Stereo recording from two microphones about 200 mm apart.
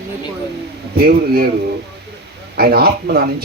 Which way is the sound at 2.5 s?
50° right (ahead or behind).